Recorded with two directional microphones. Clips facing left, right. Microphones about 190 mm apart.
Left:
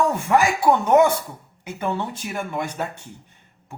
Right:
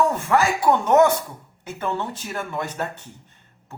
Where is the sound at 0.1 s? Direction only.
15° left (ahead or behind).